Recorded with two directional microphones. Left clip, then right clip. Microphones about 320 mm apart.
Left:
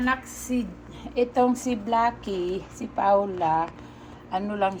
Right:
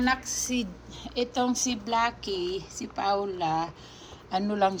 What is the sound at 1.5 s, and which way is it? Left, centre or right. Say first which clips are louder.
Speech: left 2 dB; centre.